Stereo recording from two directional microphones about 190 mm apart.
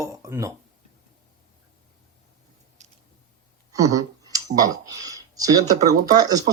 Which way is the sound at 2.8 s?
40° right (ahead or behind).